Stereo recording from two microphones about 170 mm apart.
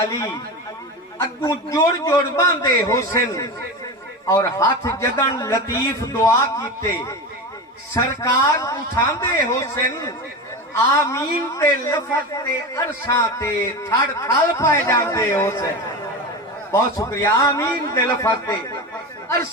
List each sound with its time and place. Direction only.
0.1 s a man's voice: 20° left (ahead or behind)
1.4 s a man's voice: 20° left (ahead or behind)
17.0 s a man's voice: 20° left (ahead or behind)